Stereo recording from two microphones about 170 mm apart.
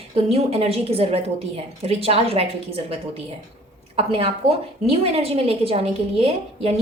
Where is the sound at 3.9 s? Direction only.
35° right (ahead or behind).